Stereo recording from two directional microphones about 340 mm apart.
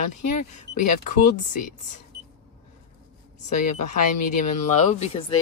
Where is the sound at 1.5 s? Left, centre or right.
Left.